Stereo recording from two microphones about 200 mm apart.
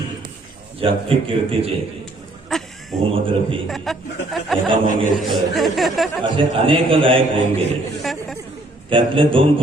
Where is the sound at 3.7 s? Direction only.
Centre (ahead or behind).